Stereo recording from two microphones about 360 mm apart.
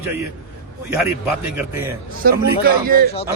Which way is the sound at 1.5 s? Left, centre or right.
Centre.